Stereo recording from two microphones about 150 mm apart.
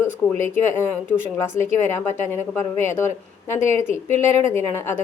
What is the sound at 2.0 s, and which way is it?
A woman's voice, 15° left (ahead or behind).